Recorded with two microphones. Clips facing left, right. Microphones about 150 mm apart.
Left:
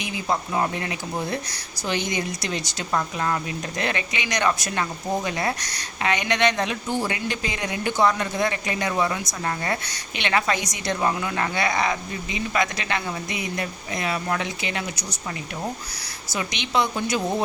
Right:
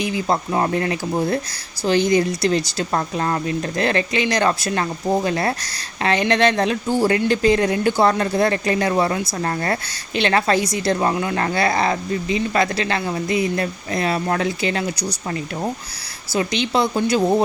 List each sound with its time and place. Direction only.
0.0 s a woman's voice: 35° right (ahead or behind)